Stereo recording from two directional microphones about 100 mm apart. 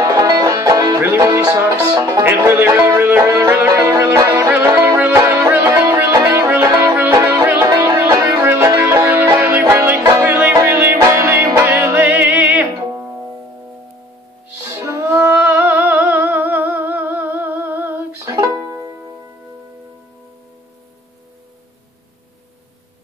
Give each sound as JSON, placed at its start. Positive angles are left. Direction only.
{"t": 0.0, "sound": "music", "side_deg": -40}
{"t": 7.4, "sound": "music", "side_deg": -20}
{"t": 7.9, "sound": "music", "side_deg": -30}
{"t": 14.6, "sound": "music", "side_deg": -30}